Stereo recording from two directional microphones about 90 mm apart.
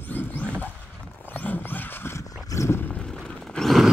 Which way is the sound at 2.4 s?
35° left (ahead or behind).